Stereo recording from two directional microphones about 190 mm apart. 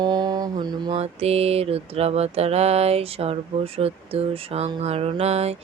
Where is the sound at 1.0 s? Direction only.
35° right (ahead or behind).